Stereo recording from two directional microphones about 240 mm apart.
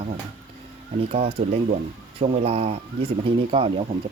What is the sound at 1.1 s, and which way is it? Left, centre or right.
Speech, right.